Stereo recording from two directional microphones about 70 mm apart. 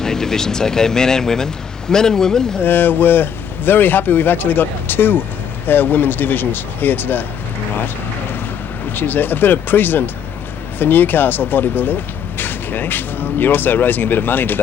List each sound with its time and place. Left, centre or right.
0.0 s speech: centre
2.6 s speech: left
9.0 s speech: left